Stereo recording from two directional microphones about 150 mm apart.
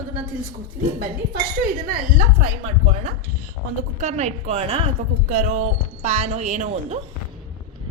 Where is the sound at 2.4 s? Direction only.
50° right (ahead or behind).